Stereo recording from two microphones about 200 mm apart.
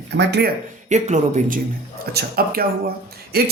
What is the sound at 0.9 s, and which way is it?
Speech, 35° right (ahead or behind).